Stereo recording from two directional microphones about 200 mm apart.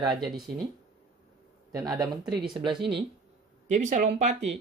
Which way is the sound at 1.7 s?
20° right (ahead or behind).